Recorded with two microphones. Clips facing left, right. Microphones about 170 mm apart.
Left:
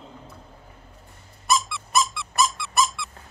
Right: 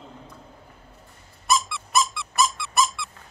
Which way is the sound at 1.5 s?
Centre (ahead or behind).